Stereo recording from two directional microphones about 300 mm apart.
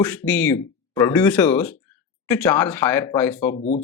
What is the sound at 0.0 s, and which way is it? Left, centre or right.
Speech, centre.